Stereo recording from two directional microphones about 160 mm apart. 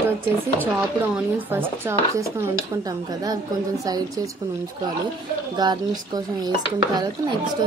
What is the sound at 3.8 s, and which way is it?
Speech, 25° right (ahead or behind).